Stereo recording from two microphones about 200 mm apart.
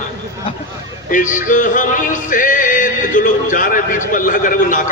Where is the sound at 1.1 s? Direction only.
40° left (ahead or behind).